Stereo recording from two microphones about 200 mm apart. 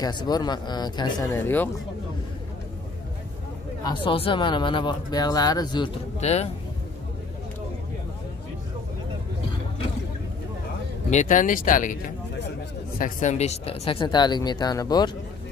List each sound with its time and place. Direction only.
0.0 s speech: 20° left (ahead or behind)
3.8 s speech: 25° left (ahead or behind)
6.1 s speech: 35° left (ahead or behind)
11.1 s speech: 40° left (ahead or behind)
13.0 s speech: 35° left (ahead or behind); by 15.0 s 20° left (ahead or behind)